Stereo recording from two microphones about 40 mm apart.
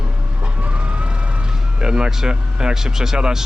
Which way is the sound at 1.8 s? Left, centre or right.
Centre.